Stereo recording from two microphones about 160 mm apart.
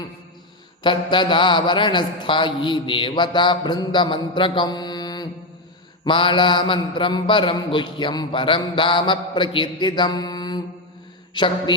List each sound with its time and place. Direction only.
0.8 s a man's voice: 30° left (ahead or behind)